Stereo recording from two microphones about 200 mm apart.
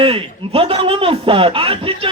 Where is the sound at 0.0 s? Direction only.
25° right (ahead or behind).